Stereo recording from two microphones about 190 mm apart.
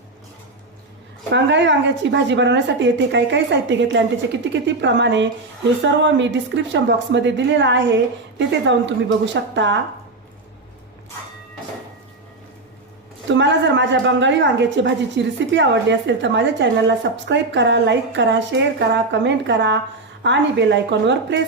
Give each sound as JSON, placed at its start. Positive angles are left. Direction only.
{"t": 1.3, "sound": "a woman's voice", "side_deg": -70}
{"t": 13.2, "sound": "a woman's voice", "side_deg": -70}